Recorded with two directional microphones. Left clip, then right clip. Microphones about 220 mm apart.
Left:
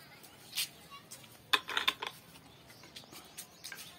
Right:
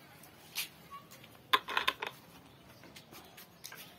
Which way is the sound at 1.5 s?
15° right (ahead or behind).